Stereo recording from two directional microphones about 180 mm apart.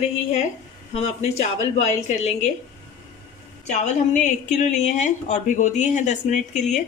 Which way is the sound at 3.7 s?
45° left (ahead or behind).